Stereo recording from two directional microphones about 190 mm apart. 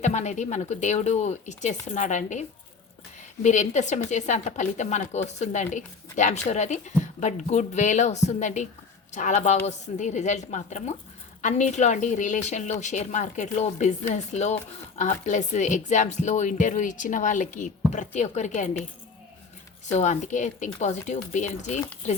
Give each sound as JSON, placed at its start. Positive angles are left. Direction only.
{"t": 0.0, "sound": "a woman's voice", "side_deg": 40}
{"t": 19.9, "sound": "a woman's voice", "side_deg": 40}